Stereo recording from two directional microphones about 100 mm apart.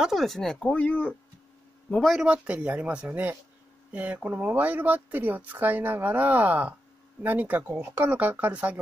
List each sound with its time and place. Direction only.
0.0 s speech: centre (ahead or behind)
1.9 s speech: 5° left (ahead or behind)
2.2 s speech: 10° right (ahead or behind)